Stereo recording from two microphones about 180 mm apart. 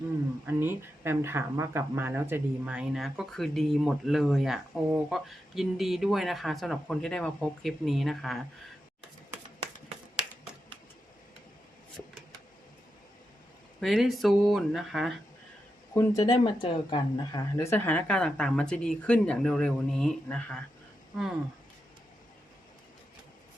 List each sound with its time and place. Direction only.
0.4 s speech: 10° right (ahead or behind)
13.7 s speech: centre (ahead or behind)
16.0 s speech: 20° left (ahead or behind)
17.6 s speech: 15° left (ahead or behind)